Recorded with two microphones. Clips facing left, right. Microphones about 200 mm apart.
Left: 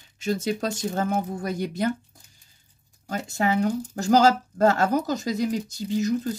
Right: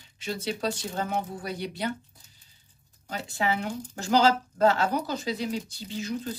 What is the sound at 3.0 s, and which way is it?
A woman's voice, 45° left (ahead or behind).